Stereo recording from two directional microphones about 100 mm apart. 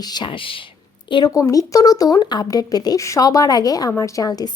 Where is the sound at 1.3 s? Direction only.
35° left (ahead or behind).